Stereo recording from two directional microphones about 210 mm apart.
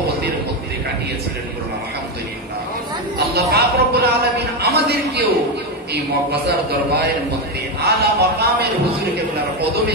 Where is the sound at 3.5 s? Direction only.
50° right (ahead or behind).